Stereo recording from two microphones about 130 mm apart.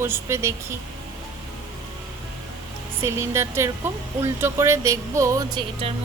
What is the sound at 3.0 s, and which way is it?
Speech, 20° right (ahead or behind).